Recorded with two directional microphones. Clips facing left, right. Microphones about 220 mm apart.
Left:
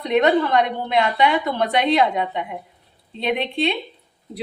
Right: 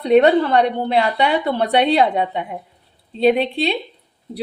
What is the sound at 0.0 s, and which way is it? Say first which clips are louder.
A woman's voice: right 5 dB; 30° right (ahead or behind).